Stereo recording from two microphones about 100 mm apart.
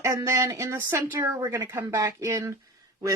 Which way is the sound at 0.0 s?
30° right (ahead or behind).